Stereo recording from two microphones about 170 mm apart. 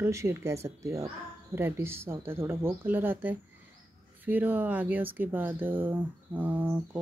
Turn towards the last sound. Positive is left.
turn(degrees=-10)  # may be behind; listen again after turning